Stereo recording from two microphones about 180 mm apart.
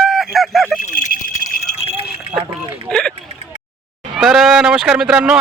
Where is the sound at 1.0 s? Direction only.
45° left (ahead or behind).